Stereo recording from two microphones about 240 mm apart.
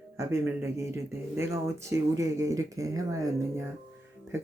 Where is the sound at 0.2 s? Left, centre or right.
Centre.